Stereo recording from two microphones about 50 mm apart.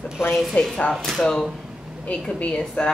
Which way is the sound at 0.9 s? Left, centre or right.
Centre.